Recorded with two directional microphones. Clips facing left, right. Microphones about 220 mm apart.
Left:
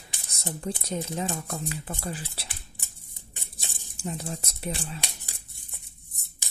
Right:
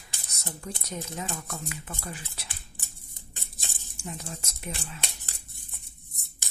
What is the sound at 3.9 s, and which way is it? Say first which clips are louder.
Speech: left 5 dB; 35° left (ahead or behind).